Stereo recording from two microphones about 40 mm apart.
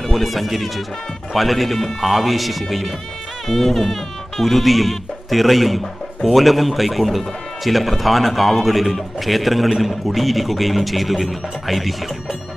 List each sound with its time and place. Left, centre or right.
0.0 s speech: centre